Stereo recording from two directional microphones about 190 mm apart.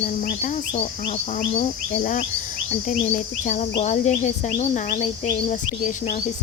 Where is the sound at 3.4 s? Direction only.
40° left (ahead or behind).